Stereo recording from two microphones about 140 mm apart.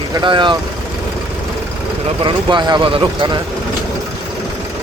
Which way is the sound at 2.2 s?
35° right (ahead or behind).